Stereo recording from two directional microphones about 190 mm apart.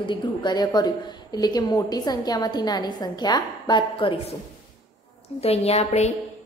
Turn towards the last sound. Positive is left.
turn(degrees=35)  # may be behind; listen again after turning